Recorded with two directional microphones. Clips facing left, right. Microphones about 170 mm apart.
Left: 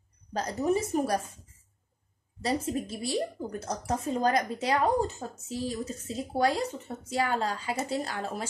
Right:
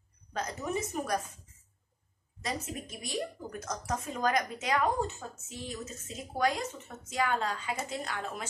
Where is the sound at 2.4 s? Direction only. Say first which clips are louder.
Left 8 dB; 30° left (ahead or behind).